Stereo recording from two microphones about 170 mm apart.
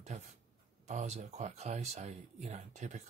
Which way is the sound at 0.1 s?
40° right (ahead or behind).